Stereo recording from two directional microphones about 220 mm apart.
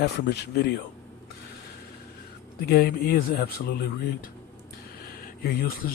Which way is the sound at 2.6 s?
45° left (ahead or behind).